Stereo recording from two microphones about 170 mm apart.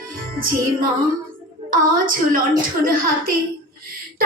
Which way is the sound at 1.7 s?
55° right (ahead or behind).